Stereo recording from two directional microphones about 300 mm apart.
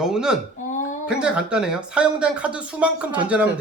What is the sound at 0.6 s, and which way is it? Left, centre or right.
Speech, left.